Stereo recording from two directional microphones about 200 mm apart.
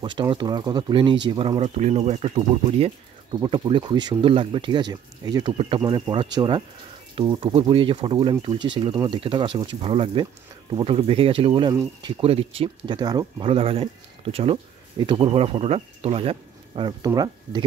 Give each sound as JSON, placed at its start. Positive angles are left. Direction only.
{"t": 0.0, "sound": "speech", "side_deg": -25}
{"t": 11.7, "sound": "speech", "side_deg": -15}
{"t": 12.2, "sound": "speech", "side_deg": -30}